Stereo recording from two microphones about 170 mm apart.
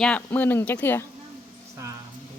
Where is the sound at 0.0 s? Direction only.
10° left (ahead or behind).